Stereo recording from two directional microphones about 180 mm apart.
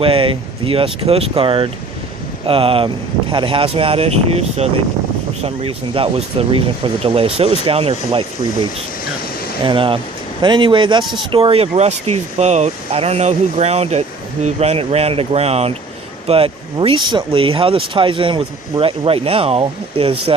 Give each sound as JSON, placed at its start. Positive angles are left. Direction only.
{"t": 0.0, "sound": "speech", "side_deg": -30}
{"t": 9.6, "sound": "speech", "side_deg": -30}